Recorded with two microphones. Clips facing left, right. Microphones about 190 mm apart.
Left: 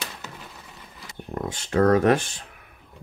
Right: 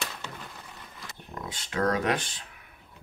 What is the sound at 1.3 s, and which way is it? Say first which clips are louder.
Speech: left 9 dB; 50° left (ahead or behind).